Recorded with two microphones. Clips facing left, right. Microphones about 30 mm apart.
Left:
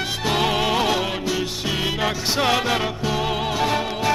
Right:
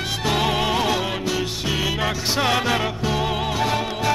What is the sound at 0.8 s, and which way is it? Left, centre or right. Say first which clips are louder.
Music: left 1 dB; left.